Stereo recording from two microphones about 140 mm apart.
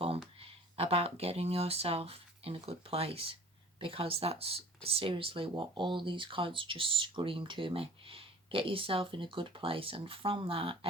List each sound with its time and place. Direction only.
0.3 s speech: 45° right (ahead or behind)